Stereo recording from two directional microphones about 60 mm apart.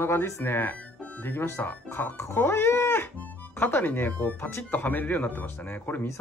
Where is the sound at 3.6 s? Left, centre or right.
Left.